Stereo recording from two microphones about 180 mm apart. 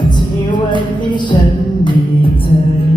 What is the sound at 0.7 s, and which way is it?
Music, 25° left (ahead or behind).